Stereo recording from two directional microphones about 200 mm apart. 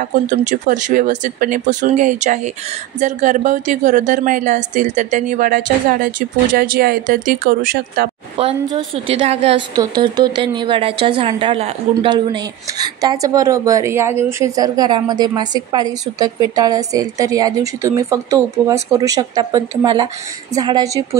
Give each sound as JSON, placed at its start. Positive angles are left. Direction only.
{"t": 0.5, "sound": "speech", "side_deg": -40}
{"t": 8.4, "sound": "a woman's voice", "side_deg": -25}